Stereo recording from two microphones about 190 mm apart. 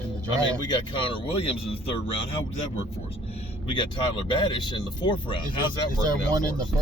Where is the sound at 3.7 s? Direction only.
25° left (ahead or behind).